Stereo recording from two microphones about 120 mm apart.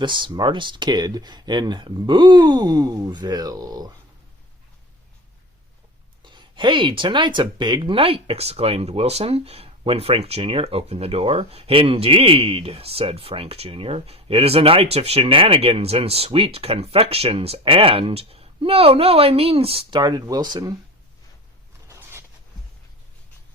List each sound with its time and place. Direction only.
0.0 s speech: 40° right (ahead or behind)
6.2 s speech: 40° right (ahead or behind)
20.0 s speech: 35° right (ahead or behind)
21.8 s a sound: 25° right (ahead or behind)